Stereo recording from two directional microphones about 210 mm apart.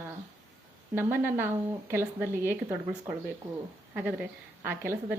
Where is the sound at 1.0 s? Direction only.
10° right (ahead or behind).